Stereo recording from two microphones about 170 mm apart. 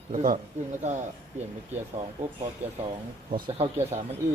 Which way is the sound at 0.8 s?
45° right (ahead or behind).